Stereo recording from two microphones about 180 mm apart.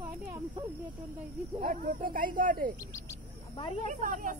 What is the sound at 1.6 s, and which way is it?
Speech, 50° right (ahead or behind).